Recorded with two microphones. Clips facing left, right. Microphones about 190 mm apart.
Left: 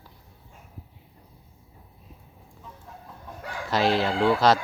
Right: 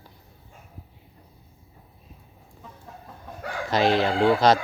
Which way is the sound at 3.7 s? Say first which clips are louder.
Right 2 dB; 5° left (ahead or behind).